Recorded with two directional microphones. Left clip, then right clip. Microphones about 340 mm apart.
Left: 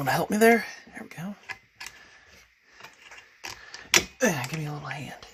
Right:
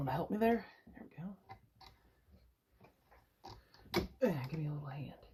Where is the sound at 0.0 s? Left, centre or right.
Left.